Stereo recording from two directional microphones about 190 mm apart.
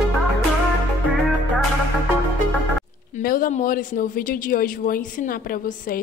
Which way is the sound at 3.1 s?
45° left (ahead or behind).